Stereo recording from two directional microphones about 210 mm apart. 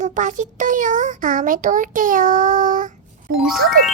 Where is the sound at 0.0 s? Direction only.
35° right (ahead or behind).